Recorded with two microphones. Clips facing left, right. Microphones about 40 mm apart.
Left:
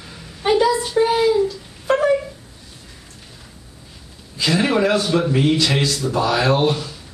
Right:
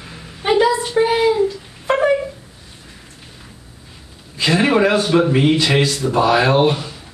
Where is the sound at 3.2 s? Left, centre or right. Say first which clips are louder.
Right 2 dB; centre.